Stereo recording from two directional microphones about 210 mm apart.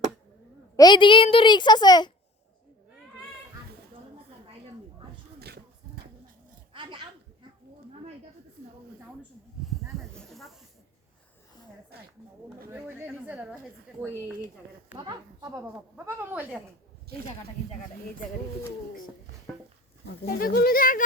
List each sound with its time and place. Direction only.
0.8 s a woman's voice: 20° left (ahead or behind)
6.7 s a sound: 25° right (ahead or behind)
10.2 s snake: centre (ahead or behind)
11.9 s speech: 50° right (ahead or behind)
12.7 s a woman's voice: 10° right (ahead or behind)
14.9 s a woman's voice: 20° right (ahead or behind)
20.2 s speech: 45° left (ahead or behind)